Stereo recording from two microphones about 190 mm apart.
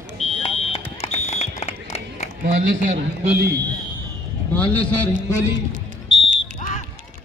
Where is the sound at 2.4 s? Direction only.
40° right (ahead or behind).